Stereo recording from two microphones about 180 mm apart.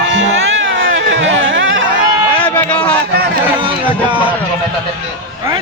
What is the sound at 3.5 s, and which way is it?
Speech, 25° right (ahead or behind).